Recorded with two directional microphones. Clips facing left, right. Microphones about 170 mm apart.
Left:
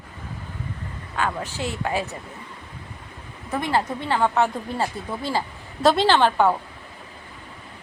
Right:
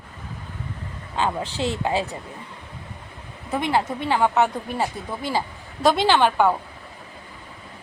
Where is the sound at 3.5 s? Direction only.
15° right (ahead or behind).